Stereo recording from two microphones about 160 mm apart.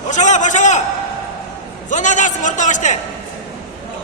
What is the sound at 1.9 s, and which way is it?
A man's voice, 50° left (ahead or behind).